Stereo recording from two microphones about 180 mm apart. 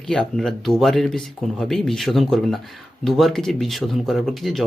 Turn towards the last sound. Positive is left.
turn(degrees=0)  # may be behind; listen again after turning